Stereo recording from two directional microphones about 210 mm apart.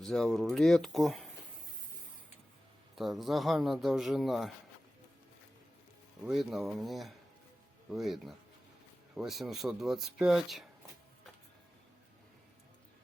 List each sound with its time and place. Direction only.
0.0 s speech: centre (ahead or behind)
2.9 s speech: centre (ahead or behind)
6.2 s speech: centre (ahead or behind)